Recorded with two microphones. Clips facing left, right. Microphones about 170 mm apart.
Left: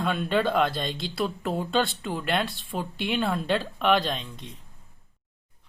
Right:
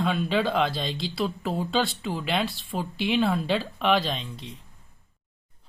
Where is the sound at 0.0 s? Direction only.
Centre (ahead or behind).